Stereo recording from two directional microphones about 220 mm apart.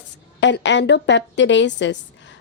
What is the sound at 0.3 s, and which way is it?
A woman's voice, 55° left (ahead or behind).